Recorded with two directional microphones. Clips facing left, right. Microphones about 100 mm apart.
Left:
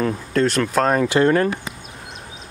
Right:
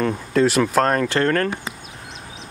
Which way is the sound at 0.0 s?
Centre (ahead or behind).